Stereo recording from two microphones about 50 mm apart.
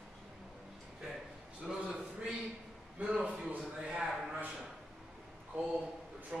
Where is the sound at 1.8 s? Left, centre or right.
Centre.